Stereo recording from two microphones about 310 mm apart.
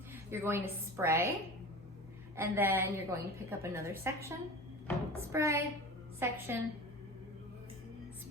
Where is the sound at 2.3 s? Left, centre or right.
Centre.